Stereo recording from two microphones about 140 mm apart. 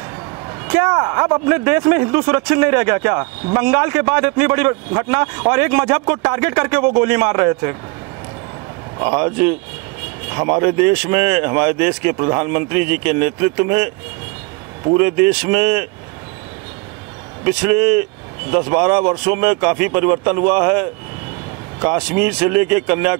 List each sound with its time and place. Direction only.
0.5 s a man's voice: 20° right (ahead or behind)
9.0 s a man's voice: 15° right (ahead or behind)
15.0 s a man's voice: 15° right (ahead or behind)
17.5 s a man's voice: 15° right (ahead or behind)